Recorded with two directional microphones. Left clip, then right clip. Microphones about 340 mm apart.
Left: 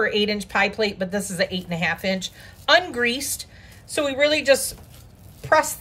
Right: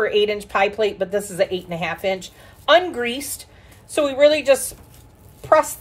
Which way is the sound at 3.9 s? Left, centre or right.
Centre.